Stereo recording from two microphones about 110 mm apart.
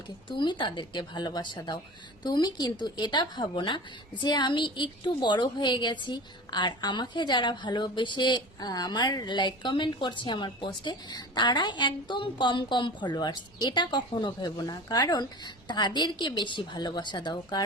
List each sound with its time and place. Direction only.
0.3 s a woman's voice: 45° left (ahead or behind)